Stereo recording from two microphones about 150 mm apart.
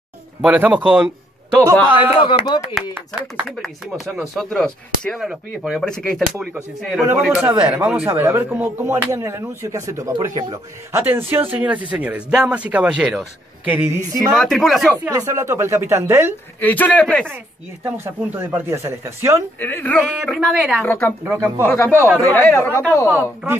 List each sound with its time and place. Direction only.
0.4 s speech: 10° right (ahead or behind)
2.0 s speech: 35° left (ahead or behind)
2.7 s speech: 10° right (ahead or behind)
3.4 s speech: centre (ahead or behind)
14.3 s speech: 5° left (ahead or behind)
15.0 s speech: 20° right (ahead or behind)
16.5 s speech: 10° left (ahead or behind)
18.0 s speech: 15° right (ahead or behind)
19.6 s speech: 10° left (ahead or behind)
20.3 s speech: 5° right (ahead or behind)
20.8 s speech: 15° left (ahead or behind)
23.0 s speech: 15° right (ahead or behind)